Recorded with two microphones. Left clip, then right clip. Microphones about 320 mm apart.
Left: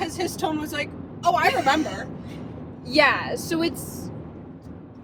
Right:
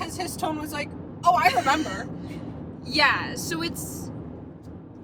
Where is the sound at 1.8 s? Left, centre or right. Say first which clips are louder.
Left 2 dB; centre.